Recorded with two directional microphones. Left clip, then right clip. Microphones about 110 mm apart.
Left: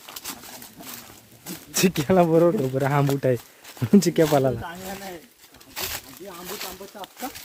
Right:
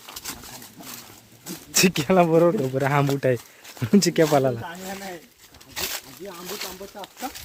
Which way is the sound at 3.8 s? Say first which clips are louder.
Left 1 dB; 35° left (ahead or behind).